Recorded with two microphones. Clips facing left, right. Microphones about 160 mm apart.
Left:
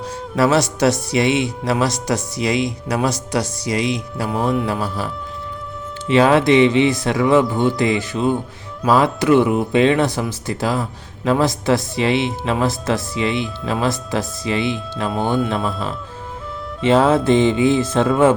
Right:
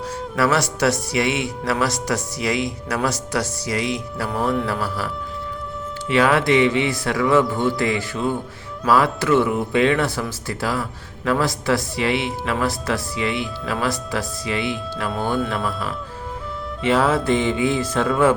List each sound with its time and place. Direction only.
0.3 s speech: 20° left (ahead or behind)